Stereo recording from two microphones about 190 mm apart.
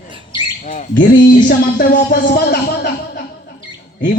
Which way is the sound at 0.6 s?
45° left (ahead or behind).